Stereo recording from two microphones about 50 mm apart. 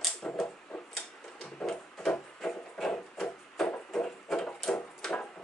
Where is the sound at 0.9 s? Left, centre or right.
Centre.